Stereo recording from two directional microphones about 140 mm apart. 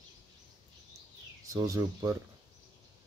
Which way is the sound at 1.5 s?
25° right (ahead or behind).